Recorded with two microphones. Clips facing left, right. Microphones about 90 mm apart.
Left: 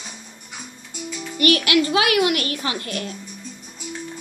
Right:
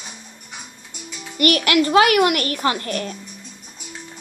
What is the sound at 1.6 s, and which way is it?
Speech, 40° right (ahead or behind).